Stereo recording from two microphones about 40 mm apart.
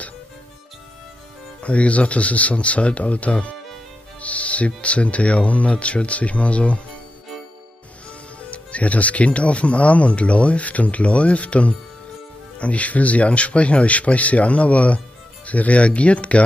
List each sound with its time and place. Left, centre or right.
1.6 s speech: left
8.4 s speech: left